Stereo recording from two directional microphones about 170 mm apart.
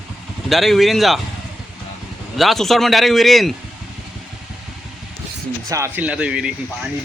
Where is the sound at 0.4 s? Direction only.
Centre (ahead or behind).